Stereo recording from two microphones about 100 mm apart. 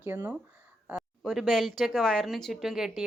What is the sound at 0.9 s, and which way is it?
Speech, centre (ahead or behind).